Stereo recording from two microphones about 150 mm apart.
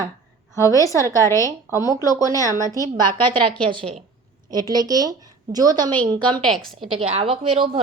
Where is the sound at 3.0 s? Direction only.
30° right (ahead or behind).